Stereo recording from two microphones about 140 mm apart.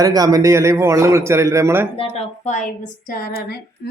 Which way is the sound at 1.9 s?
45° left (ahead or behind).